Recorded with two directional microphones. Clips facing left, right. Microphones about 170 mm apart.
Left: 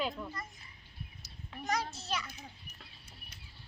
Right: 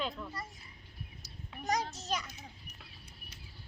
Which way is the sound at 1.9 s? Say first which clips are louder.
Right 1 dB; 45° right (ahead or behind).